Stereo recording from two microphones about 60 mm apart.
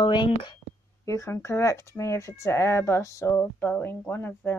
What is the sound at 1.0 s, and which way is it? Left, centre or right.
Speech, left.